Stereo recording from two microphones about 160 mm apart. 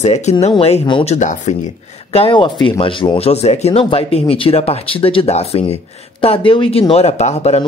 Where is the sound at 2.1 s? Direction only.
30° left (ahead or behind).